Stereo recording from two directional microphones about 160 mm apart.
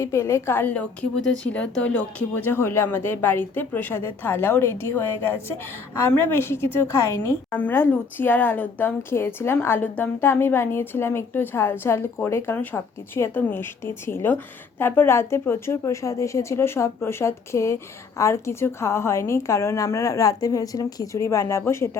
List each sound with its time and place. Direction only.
0.0 s a woman's voice: 15° left (ahead or behind)